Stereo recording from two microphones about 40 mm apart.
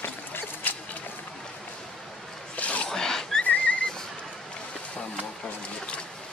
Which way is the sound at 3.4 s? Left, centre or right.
Left.